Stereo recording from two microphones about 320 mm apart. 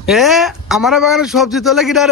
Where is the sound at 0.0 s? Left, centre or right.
Centre.